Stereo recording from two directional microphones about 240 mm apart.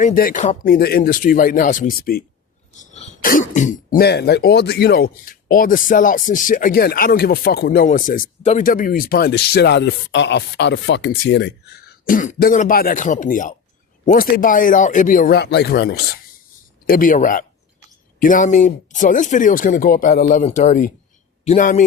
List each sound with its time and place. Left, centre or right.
0.0 s speech: left